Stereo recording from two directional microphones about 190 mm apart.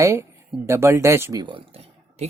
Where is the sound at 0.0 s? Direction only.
15° right (ahead or behind).